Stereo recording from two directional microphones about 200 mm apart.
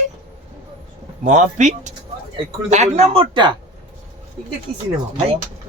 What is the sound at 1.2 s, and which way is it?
Speech, 35° right (ahead or behind).